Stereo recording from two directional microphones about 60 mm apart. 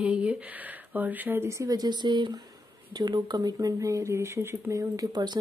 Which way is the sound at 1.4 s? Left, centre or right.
Right.